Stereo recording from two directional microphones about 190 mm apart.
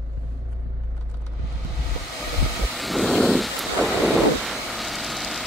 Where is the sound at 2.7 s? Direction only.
Centre (ahead or behind).